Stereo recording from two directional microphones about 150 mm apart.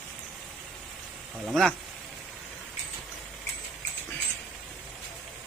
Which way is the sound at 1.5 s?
5° left (ahead or behind).